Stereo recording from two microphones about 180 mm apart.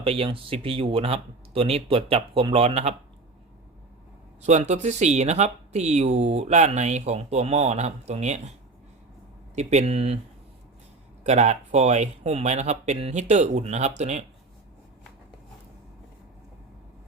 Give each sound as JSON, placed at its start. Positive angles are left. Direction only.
{"t": 0.0, "sound": "speech", "side_deg": -30}
{"t": 4.4, "sound": "speech", "side_deg": -40}
{"t": 9.6, "sound": "speech", "side_deg": -40}
{"t": 11.2, "sound": "speech", "side_deg": -40}